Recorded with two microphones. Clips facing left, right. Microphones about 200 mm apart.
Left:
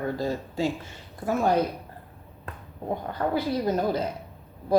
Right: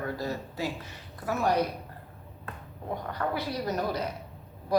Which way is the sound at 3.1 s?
25° left (ahead or behind).